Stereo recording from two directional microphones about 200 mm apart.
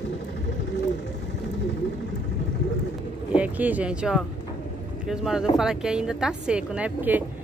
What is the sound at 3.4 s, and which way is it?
Speech, 5° right (ahead or behind).